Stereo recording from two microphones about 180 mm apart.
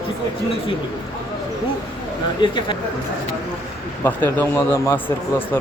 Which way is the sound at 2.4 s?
25° left (ahead or behind).